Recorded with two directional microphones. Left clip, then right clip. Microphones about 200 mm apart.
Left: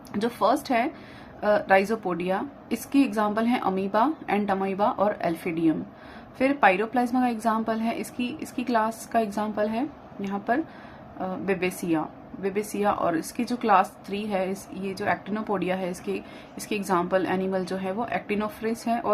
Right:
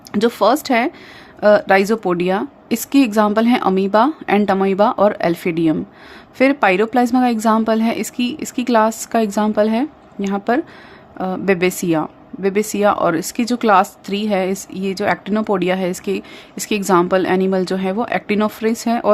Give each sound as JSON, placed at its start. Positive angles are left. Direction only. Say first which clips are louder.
{"t": 0.1, "sound": "a woman's voice", "louder": "right 9 dB", "side_deg": -50}